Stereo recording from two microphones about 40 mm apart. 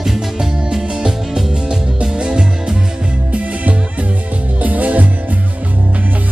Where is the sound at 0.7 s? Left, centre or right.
Centre.